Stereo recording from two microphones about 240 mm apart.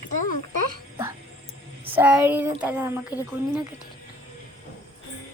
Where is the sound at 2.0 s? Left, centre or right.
Centre.